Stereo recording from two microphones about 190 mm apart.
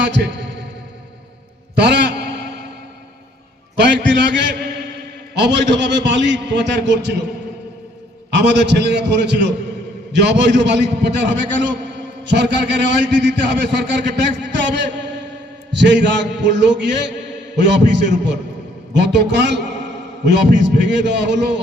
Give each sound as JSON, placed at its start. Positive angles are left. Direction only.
{"t": 1.7, "sound": "a man's voice", "side_deg": -65}
{"t": 3.8, "sound": "a sound", "side_deg": -65}
{"t": 5.4, "sound": "a man's voice", "side_deg": -65}
{"t": 8.3, "sound": "a man's voice", "side_deg": -65}